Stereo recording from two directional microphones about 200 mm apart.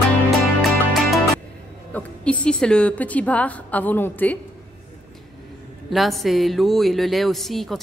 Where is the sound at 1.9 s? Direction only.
5° left (ahead or behind).